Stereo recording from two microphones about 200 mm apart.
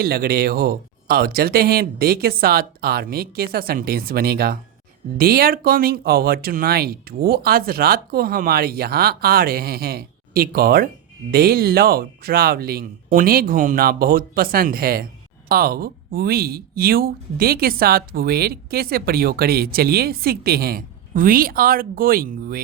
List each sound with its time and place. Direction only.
0.0 s speech: 50° right (ahead or behind)